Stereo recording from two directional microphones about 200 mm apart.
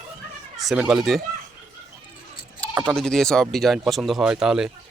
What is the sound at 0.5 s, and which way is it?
Speech, centre (ahead or behind).